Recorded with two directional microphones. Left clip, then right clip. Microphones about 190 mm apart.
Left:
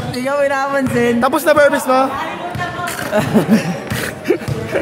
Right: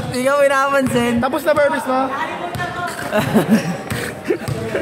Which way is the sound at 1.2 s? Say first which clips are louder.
Left 5 dB; 25° left (ahead or behind).